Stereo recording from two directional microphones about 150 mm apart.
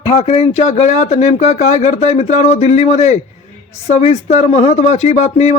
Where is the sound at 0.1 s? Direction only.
45° left (ahead or behind).